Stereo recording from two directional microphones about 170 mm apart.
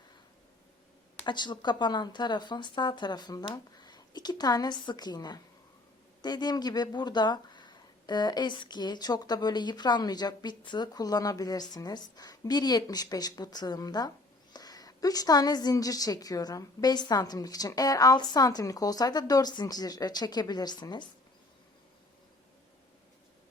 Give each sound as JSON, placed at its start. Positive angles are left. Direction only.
{"t": 1.2, "sound": "speech", "side_deg": 25}